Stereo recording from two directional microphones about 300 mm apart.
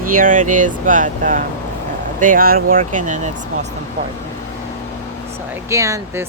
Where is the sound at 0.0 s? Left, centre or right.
Right.